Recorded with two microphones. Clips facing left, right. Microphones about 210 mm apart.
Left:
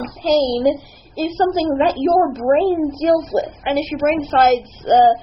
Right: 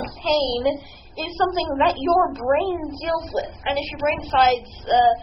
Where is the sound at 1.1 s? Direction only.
35° left (ahead or behind).